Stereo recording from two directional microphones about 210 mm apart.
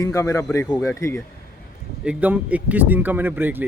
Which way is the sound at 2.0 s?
5° right (ahead or behind).